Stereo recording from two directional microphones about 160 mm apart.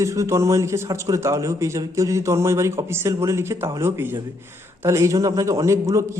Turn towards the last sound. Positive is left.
turn(degrees=-20)  # may be behind; listen again after turning